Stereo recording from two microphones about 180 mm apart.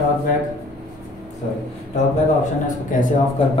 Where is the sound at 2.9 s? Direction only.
45° left (ahead or behind).